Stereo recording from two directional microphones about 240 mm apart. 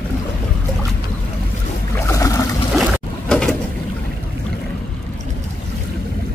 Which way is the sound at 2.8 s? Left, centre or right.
Centre.